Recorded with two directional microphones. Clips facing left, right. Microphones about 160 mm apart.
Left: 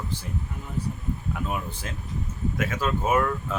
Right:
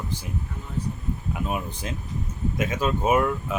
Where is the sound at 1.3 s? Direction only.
20° right (ahead or behind).